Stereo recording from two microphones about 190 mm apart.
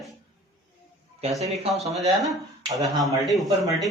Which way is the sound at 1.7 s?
Centre (ahead or behind).